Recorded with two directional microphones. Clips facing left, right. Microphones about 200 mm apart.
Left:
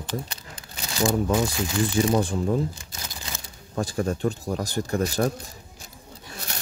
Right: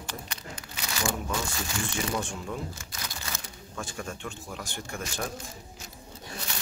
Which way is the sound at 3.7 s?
35° left (ahead or behind).